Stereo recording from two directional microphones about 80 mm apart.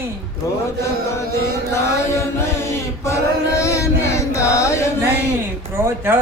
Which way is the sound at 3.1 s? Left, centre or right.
Left.